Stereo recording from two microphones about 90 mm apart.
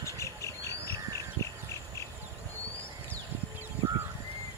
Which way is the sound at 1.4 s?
60° right (ahead or behind).